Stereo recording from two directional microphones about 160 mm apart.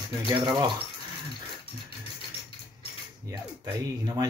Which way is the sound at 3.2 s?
25° right (ahead or behind).